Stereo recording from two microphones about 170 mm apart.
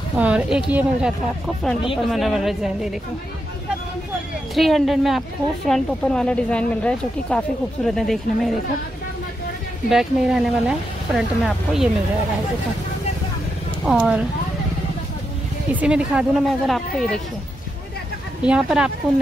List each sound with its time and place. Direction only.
0.2 s a woman's voice: 5° right (ahead or behind)
4.6 s a woman's voice: centre (ahead or behind)
9.8 s a woman's voice: centre (ahead or behind)
13.8 s a woman's voice: 5° right (ahead or behind)
15.7 s a woman's voice: 5° right (ahead or behind)
18.4 s a woman's voice: 5° right (ahead or behind)